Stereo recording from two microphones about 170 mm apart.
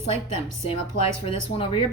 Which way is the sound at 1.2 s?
35° left (ahead or behind).